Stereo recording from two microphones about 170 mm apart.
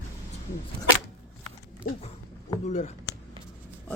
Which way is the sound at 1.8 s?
65° left (ahead or behind).